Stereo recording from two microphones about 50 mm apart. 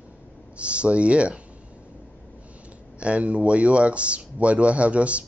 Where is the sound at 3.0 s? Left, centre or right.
Right.